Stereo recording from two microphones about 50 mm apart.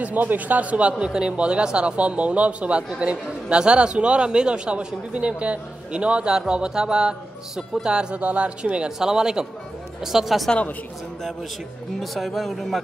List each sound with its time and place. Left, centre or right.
0.0 s speech: right; by 10.5 s centre
12.0 s speech: centre